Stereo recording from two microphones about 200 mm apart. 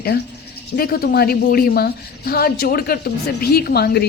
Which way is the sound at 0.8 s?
45° left (ahead or behind).